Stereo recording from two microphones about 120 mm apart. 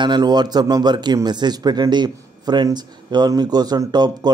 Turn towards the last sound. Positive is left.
turn(degrees=-35)  # may be behind; listen again after turning